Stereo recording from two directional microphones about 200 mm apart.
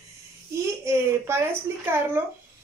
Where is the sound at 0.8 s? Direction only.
15° right (ahead or behind).